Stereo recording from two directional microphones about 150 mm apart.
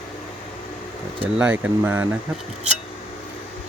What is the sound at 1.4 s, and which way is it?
Speech, 10° right (ahead or behind).